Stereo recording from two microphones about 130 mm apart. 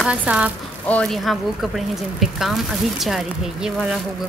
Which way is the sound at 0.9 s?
5° left (ahead or behind).